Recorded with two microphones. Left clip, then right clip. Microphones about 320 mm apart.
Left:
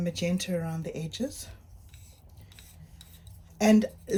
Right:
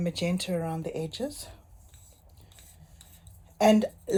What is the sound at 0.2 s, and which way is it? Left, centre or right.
Speech, centre.